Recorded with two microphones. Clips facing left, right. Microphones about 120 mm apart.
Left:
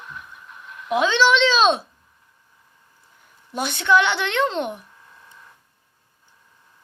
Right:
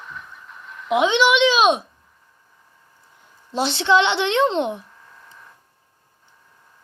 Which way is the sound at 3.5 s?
25° right (ahead or behind).